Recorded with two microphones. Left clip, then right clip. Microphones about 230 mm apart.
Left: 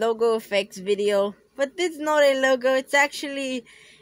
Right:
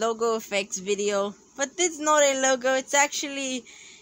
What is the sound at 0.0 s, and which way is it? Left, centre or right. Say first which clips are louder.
Speech: left 3 dB; centre.